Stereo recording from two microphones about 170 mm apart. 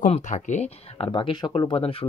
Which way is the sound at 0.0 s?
45° left (ahead or behind).